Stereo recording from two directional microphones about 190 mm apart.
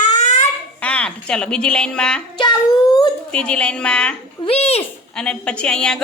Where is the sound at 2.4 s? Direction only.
25° left (ahead or behind).